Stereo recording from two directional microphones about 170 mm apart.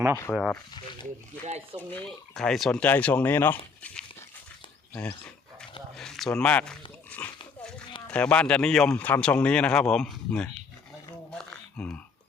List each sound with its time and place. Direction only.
0.3 s speech: centre (ahead or behind)
1.5 s speech: 40° right (ahead or behind)
2.0 s speech: 5° left (ahead or behind)
6.0 s speech: centre (ahead or behind)
7.2 s dog: 5° left (ahead or behind)
8.0 s speech: 5° left (ahead or behind)
11.3 s a sound: 5° left (ahead or behind)